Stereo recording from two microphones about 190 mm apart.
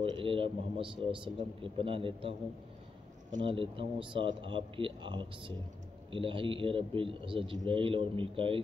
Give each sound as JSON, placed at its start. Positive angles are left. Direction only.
{"t": 0.0, "sound": "a man's voice", "side_deg": -30}
{"t": 3.4, "sound": "a man's voice", "side_deg": -30}